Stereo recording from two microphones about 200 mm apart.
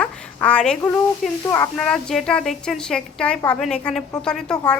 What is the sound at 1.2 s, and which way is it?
A woman's voice, centre (ahead or behind).